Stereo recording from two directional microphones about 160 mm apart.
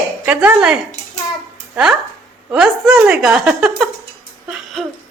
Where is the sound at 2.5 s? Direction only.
5° right (ahead or behind).